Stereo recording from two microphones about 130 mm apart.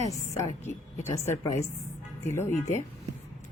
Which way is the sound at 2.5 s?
60° left (ahead or behind).